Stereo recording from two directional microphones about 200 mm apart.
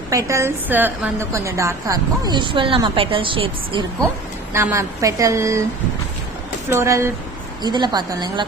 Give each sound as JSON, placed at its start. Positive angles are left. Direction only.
{"t": 0.1, "sound": "a woman's voice", "side_deg": -15}
{"t": 4.5, "sound": "a woman's voice", "side_deg": -15}
{"t": 6.7, "sound": "a woman's voice", "side_deg": -15}